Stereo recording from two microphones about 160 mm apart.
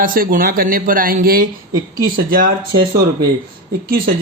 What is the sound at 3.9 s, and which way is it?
Speech, 65° right (ahead or behind).